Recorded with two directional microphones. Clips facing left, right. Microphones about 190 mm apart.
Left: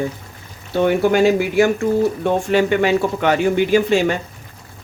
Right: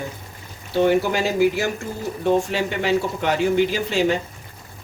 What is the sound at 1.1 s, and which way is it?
Speech, 60° left (ahead or behind).